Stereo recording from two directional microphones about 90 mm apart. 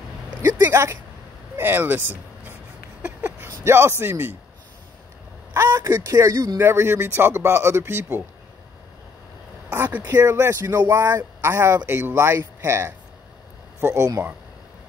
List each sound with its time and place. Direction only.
0.7 s speech: 30° right (ahead or behind)
3.0 s a sound: 20° right (ahead or behind)
4.0 s speech: 25° right (ahead or behind)
5.5 s a sound: 30° right (ahead or behind)
5.9 s speech: 35° right (ahead or behind)
6.6 s speech: 25° right (ahead or behind)
10.0 s speech: 25° right (ahead or behind)